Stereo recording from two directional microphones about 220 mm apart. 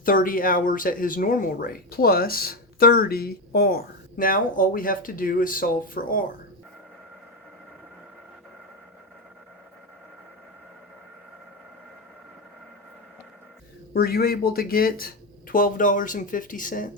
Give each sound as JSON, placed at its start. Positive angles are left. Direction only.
{"t": 0.0, "sound": "speech", "side_deg": 40}
{"t": 13.9, "sound": "speech", "side_deg": 45}